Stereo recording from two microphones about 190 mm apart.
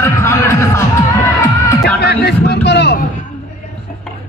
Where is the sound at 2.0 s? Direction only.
60° left (ahead or behind).